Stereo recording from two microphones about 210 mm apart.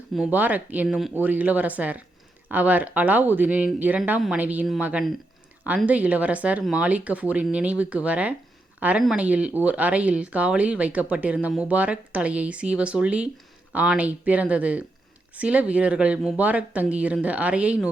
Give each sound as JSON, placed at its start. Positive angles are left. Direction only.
{"t": 0.1, "sound": "speech", "side_deg": -5}